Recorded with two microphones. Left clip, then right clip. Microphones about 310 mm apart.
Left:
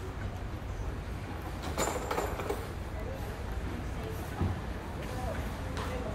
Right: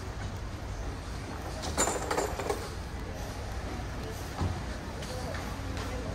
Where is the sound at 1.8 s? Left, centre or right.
Right.